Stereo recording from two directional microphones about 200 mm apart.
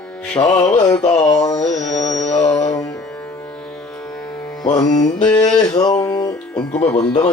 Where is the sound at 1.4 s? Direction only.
20° left (ahead or behind).